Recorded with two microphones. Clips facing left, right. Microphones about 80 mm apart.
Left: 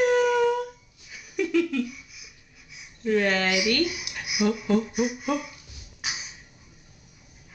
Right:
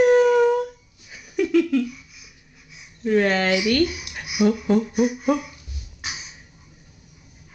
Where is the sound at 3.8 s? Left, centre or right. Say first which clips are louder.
Right 4 dB; centre.